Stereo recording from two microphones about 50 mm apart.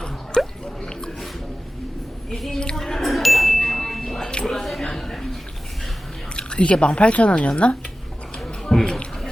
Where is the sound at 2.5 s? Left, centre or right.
Centre.